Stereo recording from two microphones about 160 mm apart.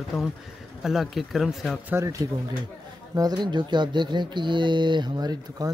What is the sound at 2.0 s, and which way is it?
Speech, 15° right (ahead or behind).